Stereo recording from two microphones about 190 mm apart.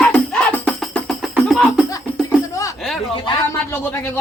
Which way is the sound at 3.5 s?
15° left (ahead or behind).